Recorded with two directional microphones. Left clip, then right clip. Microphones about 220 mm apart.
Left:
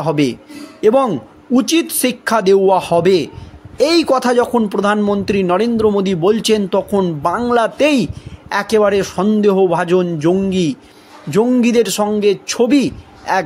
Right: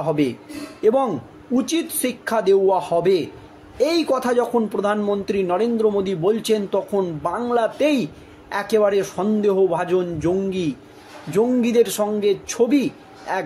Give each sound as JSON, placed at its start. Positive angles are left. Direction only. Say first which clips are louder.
{"t": 0.0, "sound": "a man's voice", "louder": "left 5 dB", "side_deg": 45}